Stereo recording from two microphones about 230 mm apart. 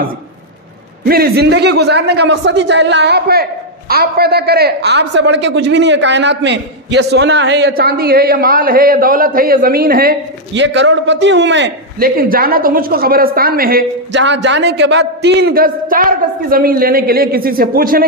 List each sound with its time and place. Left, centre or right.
1.0 s a man's voice: right